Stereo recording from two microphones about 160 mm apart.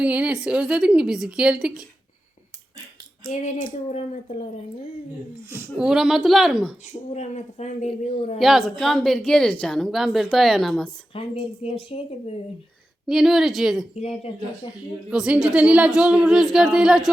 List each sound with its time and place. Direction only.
0.0 s a woman's voice: 10° right (ahead or behind)
3.2 s a woman's voice: 50° left (ahead or behind)
5.5 s a woman's voice: 10° right (ahead or behind)
7.1 s a woman's voice: 45° left (ahead or behind)
8.4 s a woman's voice: centre (ahead or behind)
11.1 s speech: 35° left (ahead or behind)
13.1 s a woman's voice: centre (ahead or behind)
15.1 s a woman's voice: 5° right (ahead or behind)